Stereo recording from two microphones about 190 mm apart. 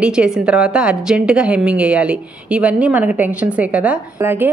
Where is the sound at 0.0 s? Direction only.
5° right (ahead or behind).